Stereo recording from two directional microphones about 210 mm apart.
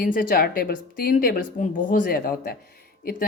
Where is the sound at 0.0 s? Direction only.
40° left (ahead or behind).